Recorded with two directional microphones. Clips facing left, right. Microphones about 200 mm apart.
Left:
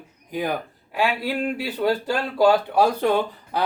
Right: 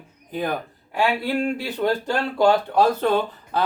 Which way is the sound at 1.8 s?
Centre (ahead or behind).